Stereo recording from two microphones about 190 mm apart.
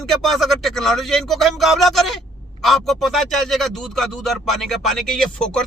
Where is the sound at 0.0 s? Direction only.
Centre (ahead or behind).